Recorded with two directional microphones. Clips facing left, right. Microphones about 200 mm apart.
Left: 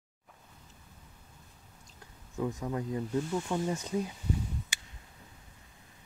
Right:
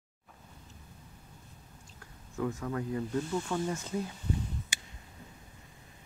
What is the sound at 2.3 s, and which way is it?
Speech, 20° left (ahead or behind).